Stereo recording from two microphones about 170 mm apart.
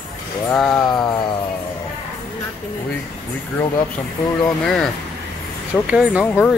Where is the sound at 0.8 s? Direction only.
25° left (ahead or behind).